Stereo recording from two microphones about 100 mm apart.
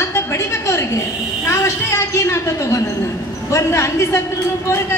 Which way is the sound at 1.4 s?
25° left (ahead or behind).